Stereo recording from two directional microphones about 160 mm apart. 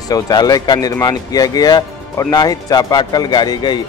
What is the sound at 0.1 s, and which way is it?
A man's voice, 25° left (ahead or behind).